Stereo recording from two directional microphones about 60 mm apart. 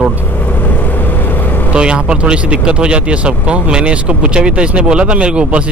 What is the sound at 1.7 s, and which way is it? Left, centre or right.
Speech, centre.